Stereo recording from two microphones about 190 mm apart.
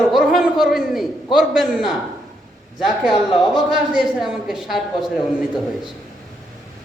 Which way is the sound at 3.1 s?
Centre (ahead or behind).